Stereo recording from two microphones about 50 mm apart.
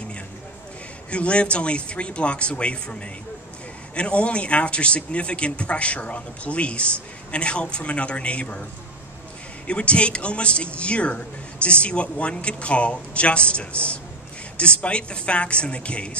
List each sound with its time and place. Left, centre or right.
1.1 s a man's voice: left
9.7 s a man's voice: left